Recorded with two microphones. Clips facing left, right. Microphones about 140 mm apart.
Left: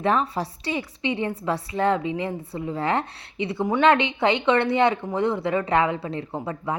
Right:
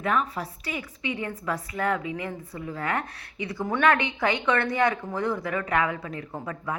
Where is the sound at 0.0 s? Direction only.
30° left (ahead or behind).